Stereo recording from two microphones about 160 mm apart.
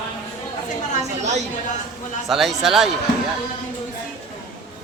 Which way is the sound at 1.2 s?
45° right (ahead or behind).